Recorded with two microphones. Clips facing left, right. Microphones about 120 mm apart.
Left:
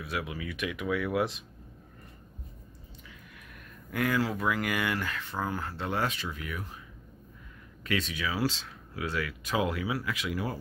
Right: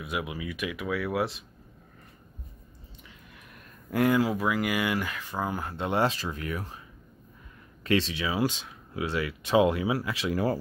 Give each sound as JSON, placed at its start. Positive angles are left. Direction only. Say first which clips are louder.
{"t": 0.0, "sound": "speech", "louder": "right 2 dB", "side_deg": -15}
{"t": 3.9, "sound": "speech", "louder": "right 6 dB", "side_deg": -30}
{"t": 4.2, "sound": "speech", "louder": "right 3 dB", "side_deg": -10}
{"t": 7.8, "sound": "speech", "louder": "right 5 dB", "side_deg": -30}